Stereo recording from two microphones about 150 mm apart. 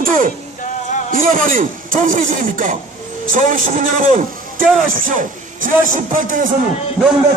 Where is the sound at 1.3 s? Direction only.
65° right (ahead or behind).